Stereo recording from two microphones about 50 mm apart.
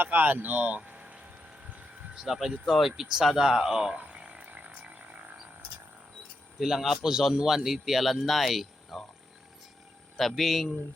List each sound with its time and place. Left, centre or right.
0.0 s speech: right
2.1 s speech: centre
3.9 s a sound: right
6.6 s speech: centre
10.2 s speech: centre